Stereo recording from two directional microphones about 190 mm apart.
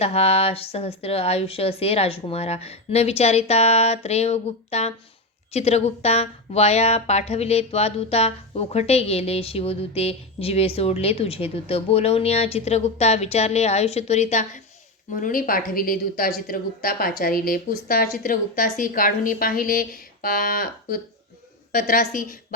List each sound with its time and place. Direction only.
0.0 s a woman's voice: 35° left (ahead or behind); by 22.4 s 50° left (ahead or behind)